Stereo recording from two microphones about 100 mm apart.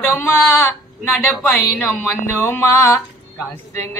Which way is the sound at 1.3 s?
20° left (ahead or behind).